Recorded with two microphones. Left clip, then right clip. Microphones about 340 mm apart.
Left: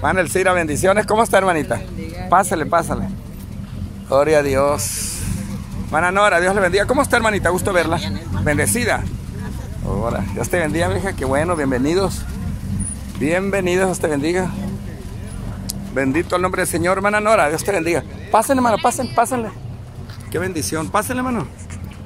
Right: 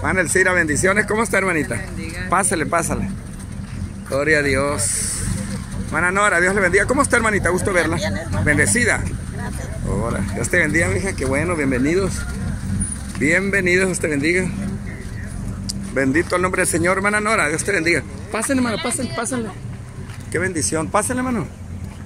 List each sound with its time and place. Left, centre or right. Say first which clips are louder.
0.0 s speech: left 1 dB; centre
4.1 s speech: left 3 dB; centre
13.2 s speech: right 1 dB; centre
14.0 s speech: even; left
15.6 s speech: even; centre
17.7 s speech: right 1 dB; left
18.6 s speech: left 6 dB; centre